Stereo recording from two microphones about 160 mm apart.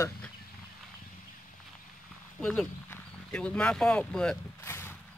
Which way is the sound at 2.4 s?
5° left (ahead or behind).